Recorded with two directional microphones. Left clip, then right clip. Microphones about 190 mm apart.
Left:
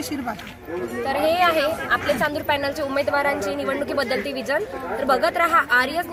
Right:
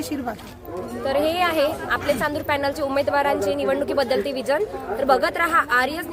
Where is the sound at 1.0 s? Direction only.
Centre (ahead or behind).